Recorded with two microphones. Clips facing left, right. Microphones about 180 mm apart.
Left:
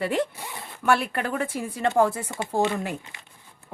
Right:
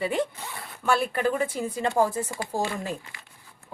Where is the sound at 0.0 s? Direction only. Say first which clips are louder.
Left 1 dB; 65° left (ahead or behind).